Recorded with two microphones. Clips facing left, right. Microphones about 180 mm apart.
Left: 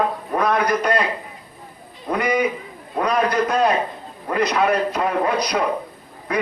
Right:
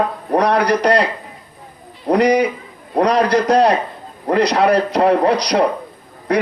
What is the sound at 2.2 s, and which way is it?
A man's voice, 75° right (ahead or behind).